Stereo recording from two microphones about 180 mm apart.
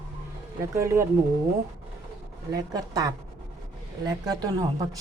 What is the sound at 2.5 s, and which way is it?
Speech, 20° right (ahead or behind).